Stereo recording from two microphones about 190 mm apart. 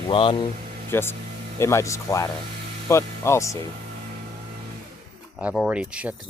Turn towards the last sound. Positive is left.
turn(degrees=-5)  # may be behind; listen again after turning